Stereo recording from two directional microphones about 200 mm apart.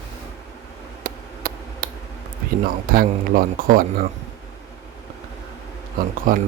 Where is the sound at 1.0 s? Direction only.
45° right (ahead or behind).